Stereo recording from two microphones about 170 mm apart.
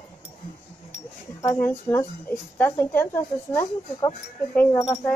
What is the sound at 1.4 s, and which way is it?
Speech, 15° left (ahead or behind).